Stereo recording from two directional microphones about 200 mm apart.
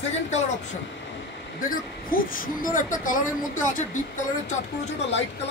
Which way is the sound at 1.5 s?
45° left (ahead or behind).